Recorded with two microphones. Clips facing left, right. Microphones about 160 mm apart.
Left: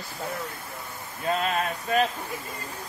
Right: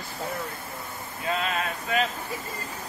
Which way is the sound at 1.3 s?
40° left (ahead or behind).